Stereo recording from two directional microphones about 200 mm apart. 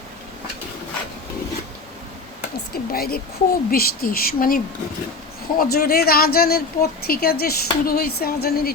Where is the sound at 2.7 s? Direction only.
50° left (ahead or behind).